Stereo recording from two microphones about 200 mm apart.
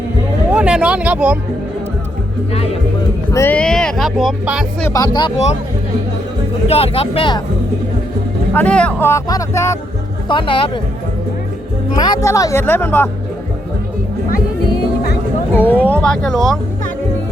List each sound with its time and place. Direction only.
0.5 s speech: 5° right (ahead or behind)
3.3 s speech: 10° left (ahead or behind)
4.9 s speech: 15° left (ahead or behind)
6.7 s speech: 30° left (ahead or behind)
8.5 s speech: 5° left (ahead or behind); by 10.6 s 25° left (ahead or behind)
11.9 s speech: 20° left (ahead or behind)
15.5 s speech: 10° left (ahead or behind)